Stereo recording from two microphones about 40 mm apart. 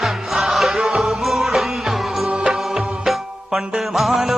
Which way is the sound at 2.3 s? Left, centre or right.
Centre.